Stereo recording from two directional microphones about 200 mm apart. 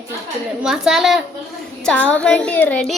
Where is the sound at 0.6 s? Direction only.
5° right (ahead or behind).